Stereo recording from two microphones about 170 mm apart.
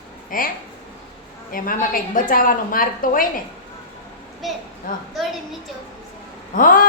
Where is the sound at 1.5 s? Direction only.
55° left (ahead or behind).